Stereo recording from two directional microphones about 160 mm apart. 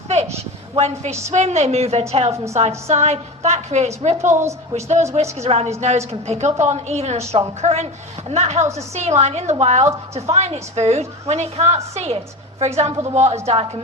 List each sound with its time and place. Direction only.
1.3 s a woman's voice: 45° right (ahead or behind)
2.3 s a woman's voice: 20° right (ahead or behind)
2.6 s a woman's voice: 40° right (ahead or behind)